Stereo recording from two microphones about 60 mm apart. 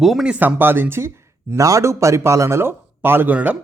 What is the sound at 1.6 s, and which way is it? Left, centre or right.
Speech, right.